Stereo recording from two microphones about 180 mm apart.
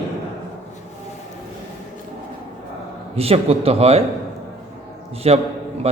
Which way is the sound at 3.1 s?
35° right (ahead or behind).